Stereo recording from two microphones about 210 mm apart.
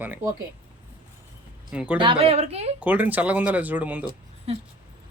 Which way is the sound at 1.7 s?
5° right (ahead or behind).